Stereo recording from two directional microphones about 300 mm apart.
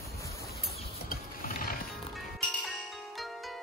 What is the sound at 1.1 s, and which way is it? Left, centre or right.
Mechanisms, left.